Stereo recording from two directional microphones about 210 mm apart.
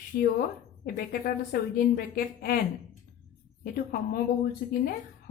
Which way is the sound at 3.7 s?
45° left (ahead or behind).